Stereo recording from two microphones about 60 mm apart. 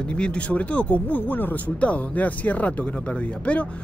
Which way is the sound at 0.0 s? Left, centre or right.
Centre.